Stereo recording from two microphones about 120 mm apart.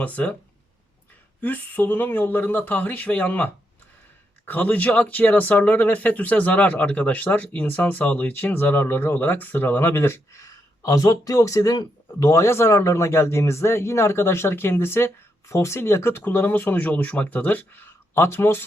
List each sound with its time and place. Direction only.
0.0 s speech: 10° left (ahead or behind)
1.4 s speech: 15° left (ahead or behind)